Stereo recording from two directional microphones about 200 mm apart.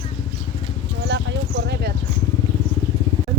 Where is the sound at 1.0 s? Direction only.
60° right (ahead or behind).